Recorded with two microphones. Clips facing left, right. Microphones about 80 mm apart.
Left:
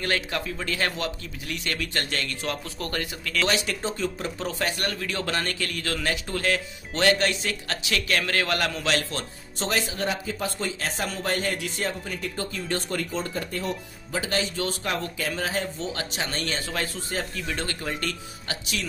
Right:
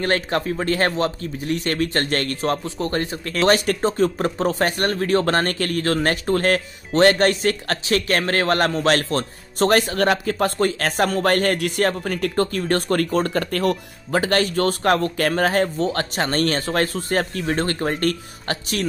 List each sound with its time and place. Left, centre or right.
0.0 s speech: right
2.6 s a man's voice: right